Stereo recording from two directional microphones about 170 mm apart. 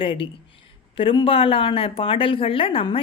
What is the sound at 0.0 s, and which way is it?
A woman's voice, 30° left (ahead or behind).